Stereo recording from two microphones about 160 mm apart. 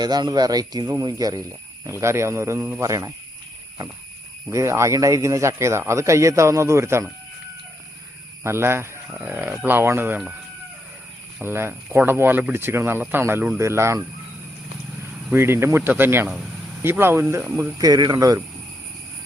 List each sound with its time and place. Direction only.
0.0 s speech: 25° right (ahead or behind)
4.4 s speech: 20° right (ahead or behind)
8.4 s speech: 15° right (ahead or behind)
11.3 s speech: 15° right (ahead or behind)
15.3 s speech: 15° right (ahead or behind)